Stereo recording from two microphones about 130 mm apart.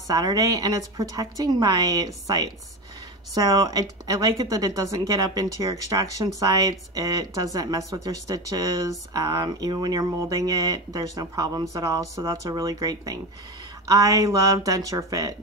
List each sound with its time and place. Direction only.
0.1 s speech: 30° right (ahead or behind)